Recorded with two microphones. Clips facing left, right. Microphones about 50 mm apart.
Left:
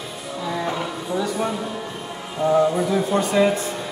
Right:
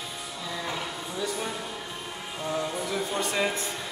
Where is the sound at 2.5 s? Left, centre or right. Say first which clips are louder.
Left 12 dB; left.